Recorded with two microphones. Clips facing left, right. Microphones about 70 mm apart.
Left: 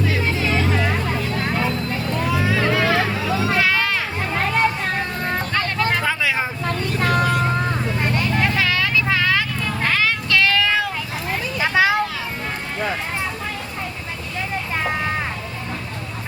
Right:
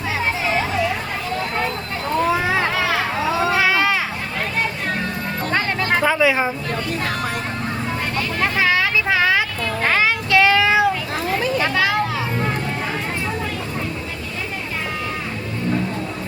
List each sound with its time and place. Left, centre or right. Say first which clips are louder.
2.3 s vehicle: right 1 dB; right
3.6 s a sound: right 2 dB; centre
5.5 s a sound: right 3 dB; centre
7.0 s vehicle: left 5 dB; left
8.5 s vehicle: right 2 dB; right
9.8 s child singing: right 2 dB; centre
11.7 s vehicle: left 2 dB; left